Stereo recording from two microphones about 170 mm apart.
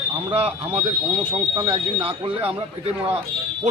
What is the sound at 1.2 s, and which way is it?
Speech, 30° right (ahead or behind).